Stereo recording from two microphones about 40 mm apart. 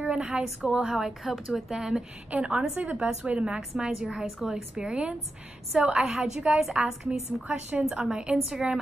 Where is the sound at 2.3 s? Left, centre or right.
Right.